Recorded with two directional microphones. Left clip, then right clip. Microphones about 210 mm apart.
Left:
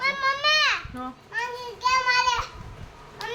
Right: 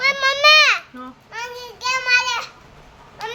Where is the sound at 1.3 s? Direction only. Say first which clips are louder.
Even; 45° right (ahead or behind).